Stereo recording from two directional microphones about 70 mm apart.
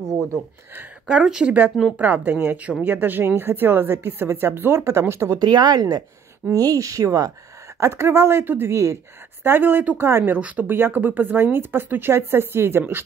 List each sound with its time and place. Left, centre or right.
1.1 s speech: centre
2.0 s speech: right
5.3 s speech: right
7.8 s speech: right
9.4 s speech: right
10.3 s speech: right